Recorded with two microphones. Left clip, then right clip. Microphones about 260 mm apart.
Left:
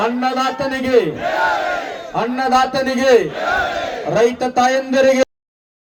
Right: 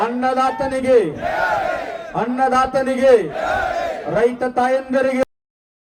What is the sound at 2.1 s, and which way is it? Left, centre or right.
A man's voice, left.